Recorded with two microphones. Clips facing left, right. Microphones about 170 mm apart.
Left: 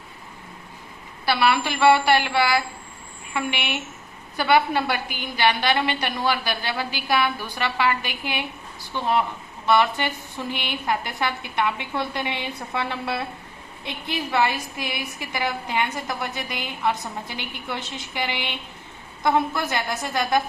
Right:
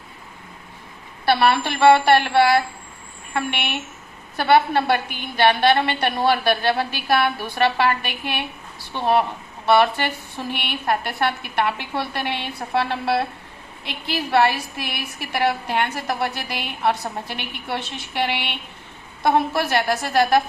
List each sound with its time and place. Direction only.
1.2 s a woman's voice: 55° right (ahead or behind)
9.6 s a woman's voice: 60° right (ahead or behind)